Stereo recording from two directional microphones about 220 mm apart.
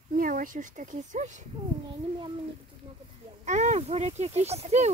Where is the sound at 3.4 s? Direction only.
30° right (ahead or behind).